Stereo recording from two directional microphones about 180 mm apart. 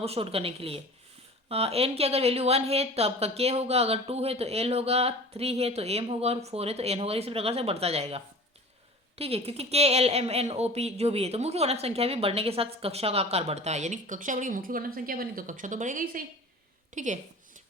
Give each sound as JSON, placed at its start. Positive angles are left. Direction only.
{"t": 0.0, "sound": "a woman's voice", "side_deg": -35}